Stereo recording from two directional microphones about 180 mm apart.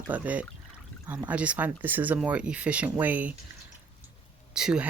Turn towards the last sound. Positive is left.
turn(degrees=-5)  # may be behind; listen again after turning